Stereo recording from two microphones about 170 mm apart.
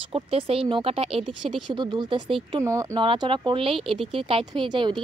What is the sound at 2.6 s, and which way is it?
Speech, 20° right (ahead or behind).